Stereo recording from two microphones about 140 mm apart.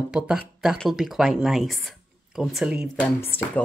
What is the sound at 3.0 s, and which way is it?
Speech, 15° left (ahead or behind).